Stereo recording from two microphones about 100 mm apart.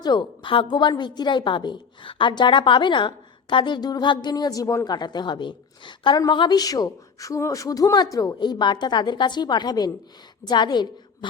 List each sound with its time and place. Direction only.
0.0 s a woman's voice: 50° left (ahead or behind); by 4.9 s 30° left (ahead or behind)
4.9 s a woman's voice: 45° left (ahead or behind)
8.4 s a woman's voice: 50° left (ahead or behind)